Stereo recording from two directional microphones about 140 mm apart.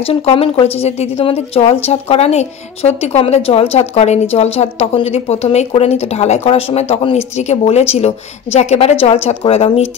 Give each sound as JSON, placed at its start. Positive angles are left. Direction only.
{"t": 0.0, "sound": "a woman's voice", "side_deg": 45}